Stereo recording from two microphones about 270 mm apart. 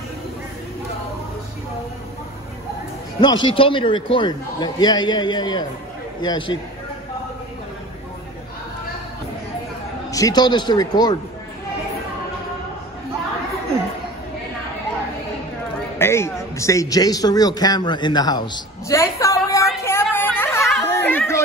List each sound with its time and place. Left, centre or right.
3.2 s a man's voice: centre
10.1 s a man's voice: centre
16.0 s a man's voice: centre
19.8 s a sound: centre